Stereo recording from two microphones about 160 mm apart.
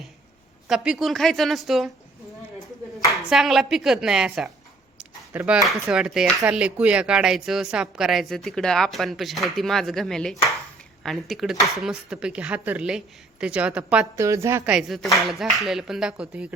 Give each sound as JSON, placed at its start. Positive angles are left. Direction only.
{"t": 0.7, "sound": "a woman's voice", "side_deg": 0}
{"t": 3.1, "sound": "a woman's voice", "side_deg": 0}
{"t": 4.9, "sound": "a sound", "side_deg": -10}
{"t": 5.9, "sound": "a woman's voice", "side_deg": -5}
{"t": 14.2, "sound": "a woman's voice", "side_deg": -20}
{"t": 14.7, "sound": "a woman's voice", "side_deg": 0}